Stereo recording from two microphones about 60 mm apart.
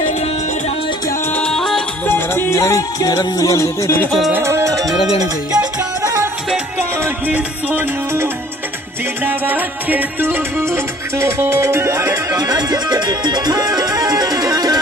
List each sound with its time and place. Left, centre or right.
1.5 s music: centre
2.0 s music: left
2.5 s music: left
3.0 s music: left
4.4 s music: right
7.2 s music: right
9.2 s music: right
10.6 s music: right
12.4 s music: right